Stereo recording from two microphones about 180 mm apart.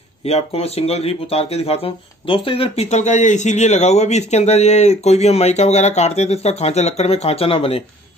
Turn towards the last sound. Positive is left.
turn(degrees=30)  # may be behind; listen again after turning